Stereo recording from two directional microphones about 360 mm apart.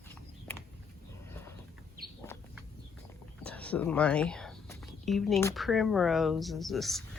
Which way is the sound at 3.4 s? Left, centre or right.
Centre.